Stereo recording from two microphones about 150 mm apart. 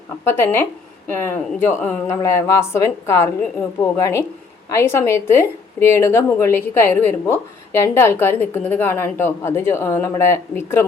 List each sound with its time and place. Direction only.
0.3 s a woman's voice: 15° left (ahead or behind)